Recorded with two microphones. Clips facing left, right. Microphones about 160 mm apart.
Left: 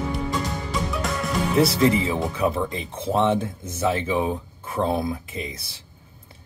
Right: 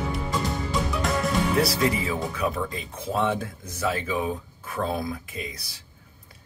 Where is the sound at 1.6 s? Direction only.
25° left (ahead or behind).